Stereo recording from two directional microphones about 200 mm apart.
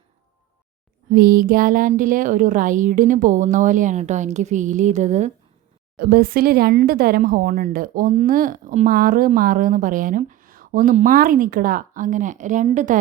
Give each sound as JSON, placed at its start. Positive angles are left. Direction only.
{"t": 1.1, "sound": "a woman's voice", "side_deg": -45}
{"t": 6.0, "sound": "speech", "side_deg": -50}